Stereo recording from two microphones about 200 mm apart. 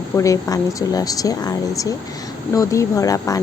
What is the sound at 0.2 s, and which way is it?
A woman's voice, 15° left (ahead or behind).